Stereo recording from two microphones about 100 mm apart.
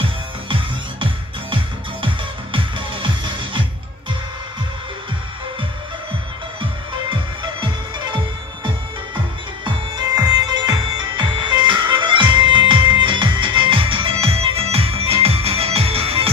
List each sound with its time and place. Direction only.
0.4 s music: 60° right (ahead or behind)
2.5 s music: 60° right (ahead or behind)
7.6 s music: 50° right (ahead or behind)
9.6 s music: 40° right (ahead or behind); by 16.3 s 75° right (ahead or behind)